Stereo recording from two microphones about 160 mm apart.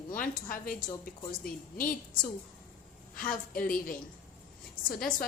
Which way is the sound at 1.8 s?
60° left (ahead or behind).